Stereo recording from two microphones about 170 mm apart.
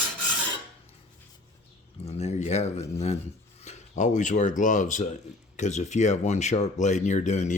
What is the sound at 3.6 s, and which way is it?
Speech, 45° left (ahead or behind).